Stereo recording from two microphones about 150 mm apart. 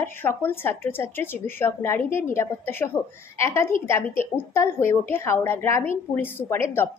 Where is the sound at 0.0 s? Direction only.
15° left (ahead or behind).